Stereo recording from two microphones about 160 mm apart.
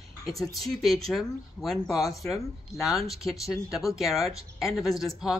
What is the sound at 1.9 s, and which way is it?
Speech, 20° left (ahead or behind).